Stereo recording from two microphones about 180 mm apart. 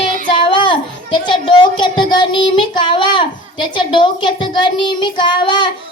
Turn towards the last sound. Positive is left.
turn(degrees=25)  # may be behind; listen again after turning